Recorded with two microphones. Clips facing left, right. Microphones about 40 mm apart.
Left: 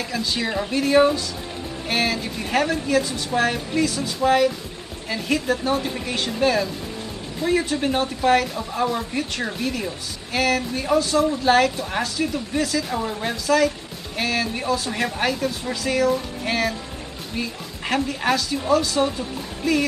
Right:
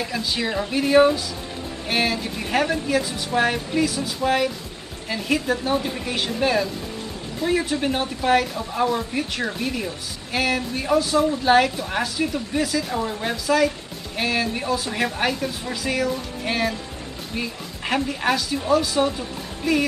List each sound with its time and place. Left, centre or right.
0.0 s speech: centre
19.6 s music: centre